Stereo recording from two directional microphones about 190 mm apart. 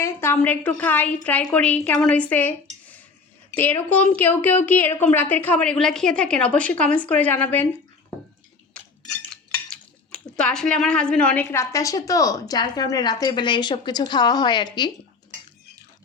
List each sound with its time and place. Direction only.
0.0 s a woman's voice: 10° left (ahead or behind)
3.6 s a woman's voice: 10° left (ahead or behind)
8.7 s chink: 5° left (ahead or behind)
9.3 s cutlery: 5° left (ahead or behind)
10.3 s a woman's voice: 5° left (ahead or behind); by 14.9 s 25° left (ahead or behind)